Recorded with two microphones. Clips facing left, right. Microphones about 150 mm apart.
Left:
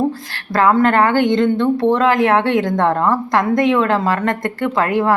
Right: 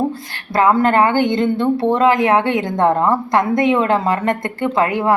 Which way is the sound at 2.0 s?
20° right (ahead or behind).